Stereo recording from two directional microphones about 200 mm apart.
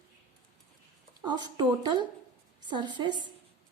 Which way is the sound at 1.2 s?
20° right (ahead or behind).